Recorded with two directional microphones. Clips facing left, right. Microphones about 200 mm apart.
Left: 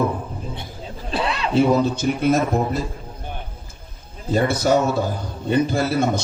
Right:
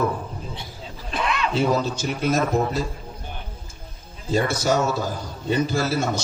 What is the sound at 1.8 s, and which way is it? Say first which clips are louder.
Speech: left 5 dB; 55° left (ahead or behind).